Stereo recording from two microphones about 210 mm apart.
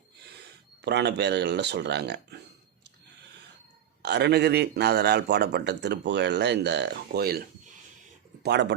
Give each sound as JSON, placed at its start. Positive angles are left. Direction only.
{"t": 0.3, "sound": "speech", "side_deg": -50}
{"t": 4.0, "sound": "a man's voice", "side_deg": -50}
{"t": 8.4, "sound": "speech", "side_deg": -55}